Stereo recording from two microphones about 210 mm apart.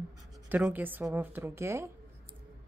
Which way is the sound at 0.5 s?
5° right (ahead or behind).